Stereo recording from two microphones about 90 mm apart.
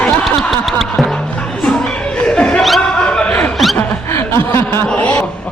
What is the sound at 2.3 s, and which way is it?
Laughter, 10° left (ahead or behind).